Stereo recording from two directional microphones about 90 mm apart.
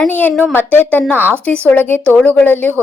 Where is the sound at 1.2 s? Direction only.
20° right (ahead or behind).